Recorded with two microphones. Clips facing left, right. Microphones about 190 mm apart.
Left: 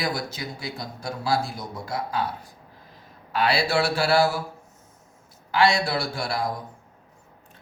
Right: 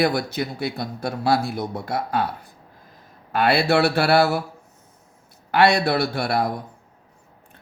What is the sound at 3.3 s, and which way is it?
Speech, 55° right (ahead or behind).